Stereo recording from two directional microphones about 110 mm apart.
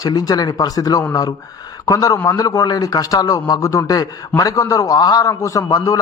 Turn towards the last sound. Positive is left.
turn(degrees=30)  # may be behind; listen again after turning